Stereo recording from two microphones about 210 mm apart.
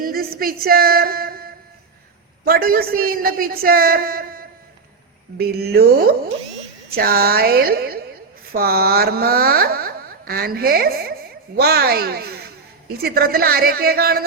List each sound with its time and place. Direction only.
0.0 s speech: 45° right (ahead or behind)
2.4 s speech: 45° right (ahead or behind)